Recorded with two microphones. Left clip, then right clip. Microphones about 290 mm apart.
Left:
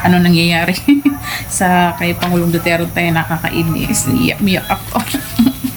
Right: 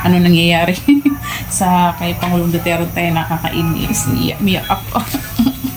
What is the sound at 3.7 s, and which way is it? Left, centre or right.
Speech, left.